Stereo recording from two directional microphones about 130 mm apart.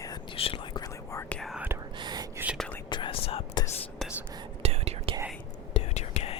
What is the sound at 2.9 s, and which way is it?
Whispering, 40° left (ahead or behind).